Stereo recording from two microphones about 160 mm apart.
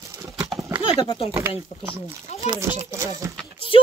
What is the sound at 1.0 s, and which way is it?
Speech, 30° left (ahead or behind).